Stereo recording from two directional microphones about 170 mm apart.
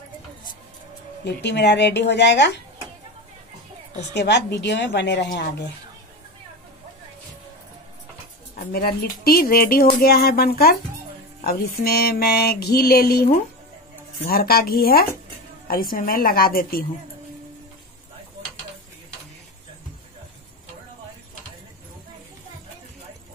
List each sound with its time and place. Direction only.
1.2 s a woman's voice: 80° left
4.1 s a woman's voice: 90° left
8.5 s a sound: 65° left (ahead or behind)